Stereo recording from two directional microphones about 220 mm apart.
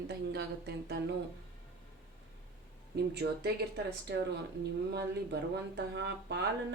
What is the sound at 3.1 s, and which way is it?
Speech, 50° right (ahead or behind).